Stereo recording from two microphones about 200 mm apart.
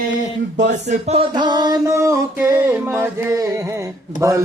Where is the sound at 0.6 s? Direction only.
35° right (ahead or behind); by 3.4 s 15° right (ahead or behind).